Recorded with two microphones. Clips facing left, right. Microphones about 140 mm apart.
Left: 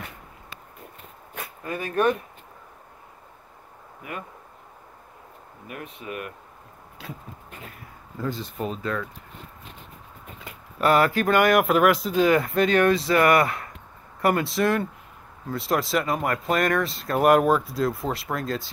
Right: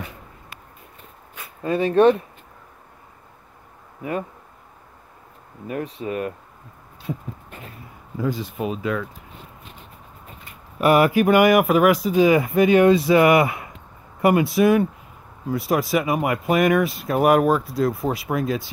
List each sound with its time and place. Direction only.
1.6 s speech: 25° right (ahead or behind)
5.7 s speech: 35° right (ahead or behind)
8.2 s speech: 5° right (ahead or behind)
10.8 s speech: 15° right (ahead or behind)